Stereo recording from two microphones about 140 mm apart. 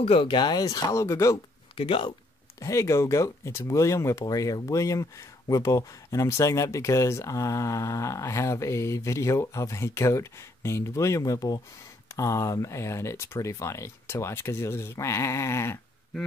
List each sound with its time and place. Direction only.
0.0 s speech: 45° left (ahead or behind); by 1.4 s 20° left (ahead or behind)
1.8 s speech: 40° left (ahead or behind)
2.6 s speech: 20° left (ahead or behind)